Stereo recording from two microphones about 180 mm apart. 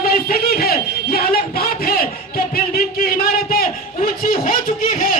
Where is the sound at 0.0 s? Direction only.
55° left (ahead or behind).